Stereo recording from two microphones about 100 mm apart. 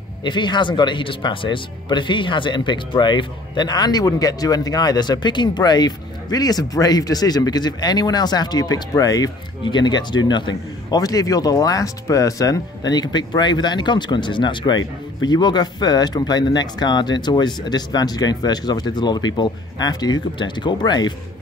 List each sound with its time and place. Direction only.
0.2 s speech: 50° left (ahead or behind)